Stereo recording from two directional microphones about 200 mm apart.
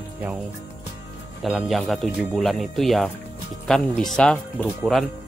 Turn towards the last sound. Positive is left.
turn(degrees=0)  # may be behind; listen again after turning